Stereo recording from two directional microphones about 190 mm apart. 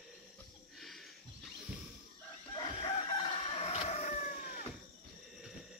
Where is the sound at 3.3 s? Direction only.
30° left (ahead or behind).